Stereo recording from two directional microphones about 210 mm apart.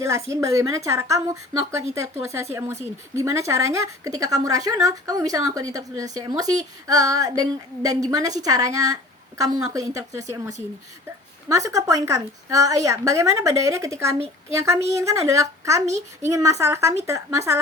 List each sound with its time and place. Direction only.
0.3 s speech: 15° right (ahead or behind)
11.4 s speech: 15° right (ahead or behind)